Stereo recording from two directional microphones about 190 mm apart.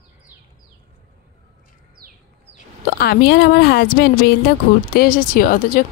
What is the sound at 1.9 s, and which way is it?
Bird, 50° right (ahead or behind).